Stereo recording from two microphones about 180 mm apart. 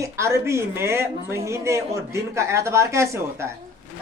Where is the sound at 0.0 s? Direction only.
15° right (ahead or behind).